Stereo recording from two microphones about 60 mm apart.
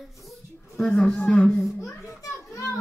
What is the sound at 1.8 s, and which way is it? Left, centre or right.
Children playing, left.